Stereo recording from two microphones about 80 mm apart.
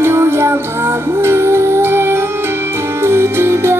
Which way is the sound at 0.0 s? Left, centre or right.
Right.